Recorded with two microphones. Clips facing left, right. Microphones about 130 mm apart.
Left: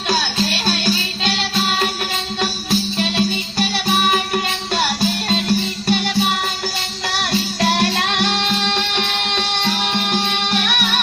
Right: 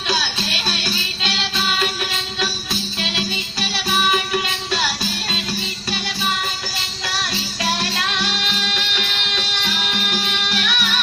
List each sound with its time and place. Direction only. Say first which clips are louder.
0.1 s music: left 4 dB; 45° left (ahead or behind)